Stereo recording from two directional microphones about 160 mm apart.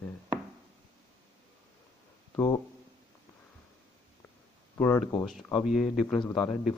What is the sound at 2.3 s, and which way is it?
Speech, 20° left (ahead or behind).